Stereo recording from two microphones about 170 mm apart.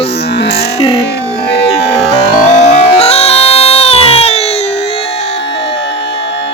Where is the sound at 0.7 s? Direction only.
35° left (ahead or behind).